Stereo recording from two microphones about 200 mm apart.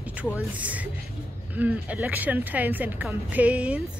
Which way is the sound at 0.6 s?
5° right (ahead or behind).